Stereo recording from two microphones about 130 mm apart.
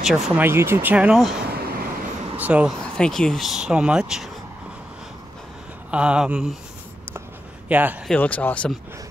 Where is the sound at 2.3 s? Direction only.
10° right (ahead or behind).